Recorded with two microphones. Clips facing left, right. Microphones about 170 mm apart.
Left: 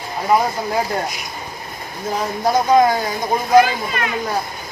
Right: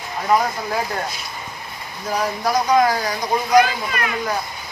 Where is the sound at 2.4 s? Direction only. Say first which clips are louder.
Left 4 dB; 25° left (ahead or behind).